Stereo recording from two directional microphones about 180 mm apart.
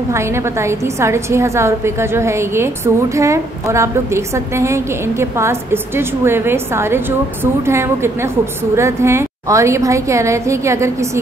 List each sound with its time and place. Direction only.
0.1 s a woman's voice: 15° right (ahead or behind)